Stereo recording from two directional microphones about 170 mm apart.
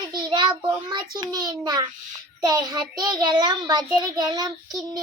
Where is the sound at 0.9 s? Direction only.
25° right (ahead or behind).